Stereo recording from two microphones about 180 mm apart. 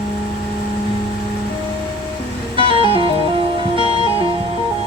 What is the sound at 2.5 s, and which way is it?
Music, 30° right (ahead or behind).